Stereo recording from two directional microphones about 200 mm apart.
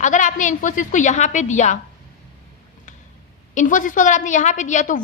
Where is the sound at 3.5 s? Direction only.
40° left (ahead or behind).